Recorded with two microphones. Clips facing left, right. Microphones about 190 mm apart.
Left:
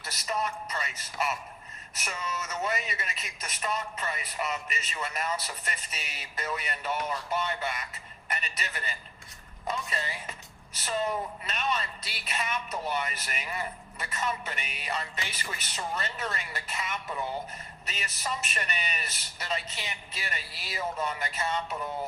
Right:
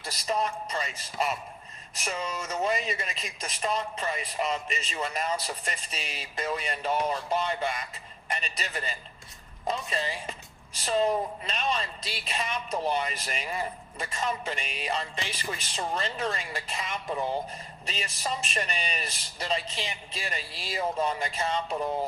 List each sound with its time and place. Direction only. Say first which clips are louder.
0.3 s a man's voice: right 3 dB; 30° right (ahead or behind)